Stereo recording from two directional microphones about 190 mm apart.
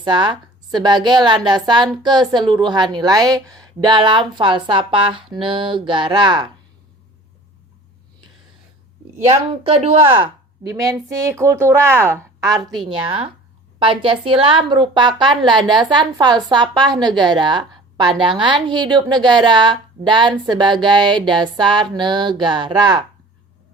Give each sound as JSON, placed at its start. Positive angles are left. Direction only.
{"t": 0.0, "sound": "a woman's voice", "side_deg": -25}
{"t": 9.3, "sound": "a woman's voice", "side_deg": -30}
{"t": 10.8, "sound": "a woman's voice", "side_deg": -15}